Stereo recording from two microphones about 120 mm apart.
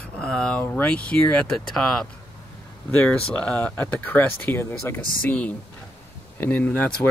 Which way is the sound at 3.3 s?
10° left (ahead or behind).